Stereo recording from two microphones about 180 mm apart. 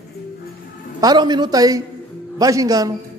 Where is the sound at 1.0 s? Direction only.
25° right (ahead or behind).